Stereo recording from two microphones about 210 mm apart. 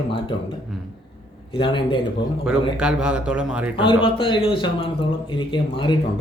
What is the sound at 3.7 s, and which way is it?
Speech, 25° left (ahead or behind).